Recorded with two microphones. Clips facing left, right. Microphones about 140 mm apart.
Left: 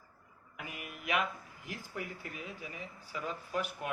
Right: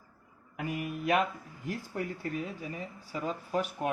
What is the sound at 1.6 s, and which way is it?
Speech, 40° right (ahead or behind).